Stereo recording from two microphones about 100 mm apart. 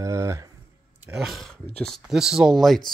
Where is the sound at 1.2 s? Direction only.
Centre (ahead or behind).